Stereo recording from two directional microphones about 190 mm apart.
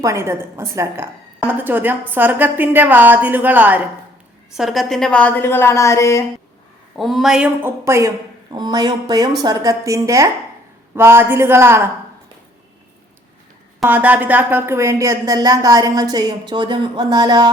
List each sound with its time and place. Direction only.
0.0 s a woman's voice: 15° right (ahead or behind); by 6.2 s 15° left (ahead or behind)
6.9 s a woman's voice: centre (ahead or behind)
13.8 s speech: 10° right (ahead or behind)